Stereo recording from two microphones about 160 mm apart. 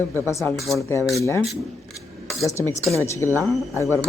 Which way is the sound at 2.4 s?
15° left (ahead or behind).